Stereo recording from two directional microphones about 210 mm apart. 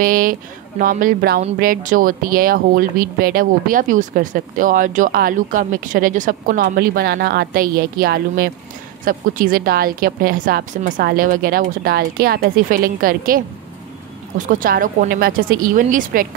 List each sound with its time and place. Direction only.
0.0 s a woman's voice: 40° right (ahead or behind)
14.4 s speech: 40° right (ahead or behind)